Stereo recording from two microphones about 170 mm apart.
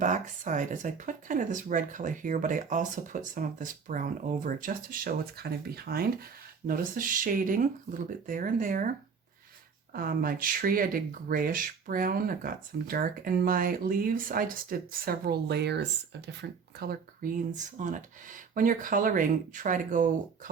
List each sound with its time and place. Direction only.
0.0 s speech: 50° right (ahead or behind)
9.9 s speech: 60° right (ahead or behind)